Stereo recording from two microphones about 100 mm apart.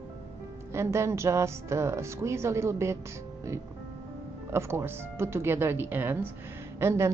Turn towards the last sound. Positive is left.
turn(degrees=-25)  # may be behind; listen again after turning